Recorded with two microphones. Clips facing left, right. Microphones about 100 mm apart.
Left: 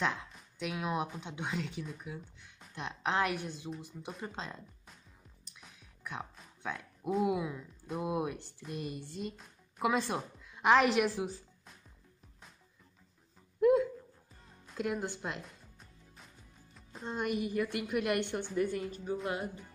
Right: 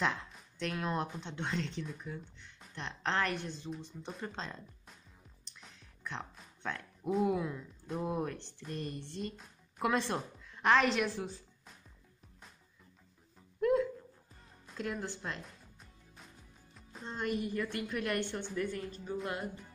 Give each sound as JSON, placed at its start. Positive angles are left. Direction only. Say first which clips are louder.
{"t": 0.0, "sound": "speech", "louder": "even", "side_deg": 0}
{"t": 13.6, "sound": "a sound", "louder": "left 4 dB", "side_deg": 10}
{"t": 14.7, "sound": "speech", "louder": "left 3 dB", "side_deg": 10}
{"t": 15.4, "sound": "music", "louder": "left 1 dB", "side_deg": 0}
{"t": 17.1, "sound": "speech", "louder": "left 2 dB", "side_deg": 15}